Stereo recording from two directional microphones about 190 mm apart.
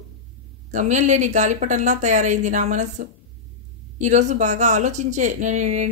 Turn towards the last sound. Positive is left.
turn(degrees=-40)  # may be behind; listen again after turning